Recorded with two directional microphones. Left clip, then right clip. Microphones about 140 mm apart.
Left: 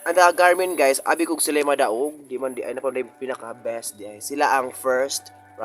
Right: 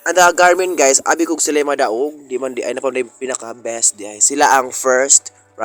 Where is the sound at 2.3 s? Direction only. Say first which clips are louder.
Right 7 dB; 40° right (ahead or behind).